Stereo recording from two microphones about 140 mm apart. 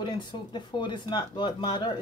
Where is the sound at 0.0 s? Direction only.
30° left (ahead or behind).